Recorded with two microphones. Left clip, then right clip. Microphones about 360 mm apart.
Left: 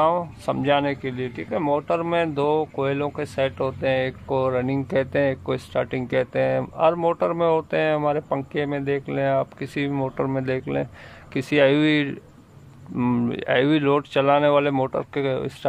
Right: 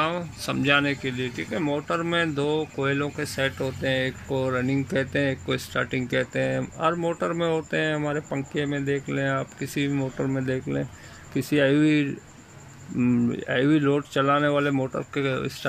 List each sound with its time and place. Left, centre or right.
0.0 s speech: left